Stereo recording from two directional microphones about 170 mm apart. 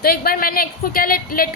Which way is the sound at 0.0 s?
65° left (ahead or behind).